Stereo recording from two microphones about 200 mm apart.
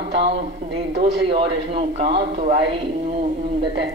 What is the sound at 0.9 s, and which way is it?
A man's voice, 30° right (ahead or behind).